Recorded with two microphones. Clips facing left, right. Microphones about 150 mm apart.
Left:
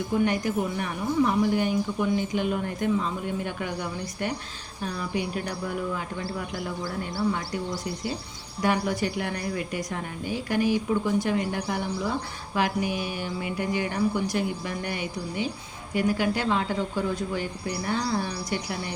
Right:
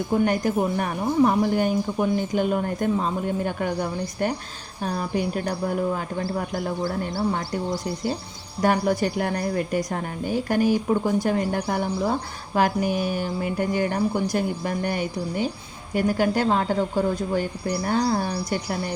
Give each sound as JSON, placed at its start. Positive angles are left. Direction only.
{"t": 0.1, "sound": "speech", "side_deg": -45}
{"t": 8.6, "sound": "speech", "side_deg": -45}